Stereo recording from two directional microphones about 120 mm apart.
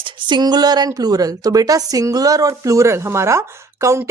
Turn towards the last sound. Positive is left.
turn(degrees=-25)  # may be behind; listen again after turning